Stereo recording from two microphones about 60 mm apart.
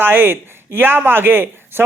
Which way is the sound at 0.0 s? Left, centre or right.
Right.